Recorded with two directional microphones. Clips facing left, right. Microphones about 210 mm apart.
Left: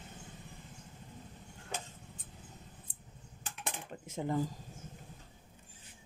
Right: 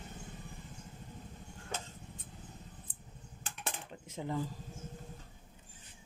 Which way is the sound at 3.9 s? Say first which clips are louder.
Left 4 dB; 45° left (ahead or behind).